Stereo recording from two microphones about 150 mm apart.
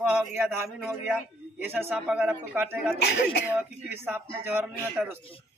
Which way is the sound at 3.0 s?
90° left.